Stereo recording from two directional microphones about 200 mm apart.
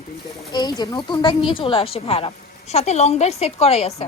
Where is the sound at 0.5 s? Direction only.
20° left (ahead or behind).